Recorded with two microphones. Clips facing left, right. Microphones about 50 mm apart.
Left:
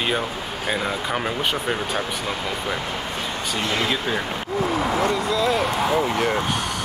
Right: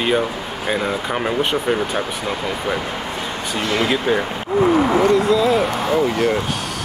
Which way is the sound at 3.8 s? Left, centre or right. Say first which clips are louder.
Right 8 dB; centre.